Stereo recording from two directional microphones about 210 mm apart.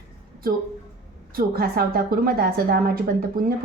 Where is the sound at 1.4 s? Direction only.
45° right (ahead or behind).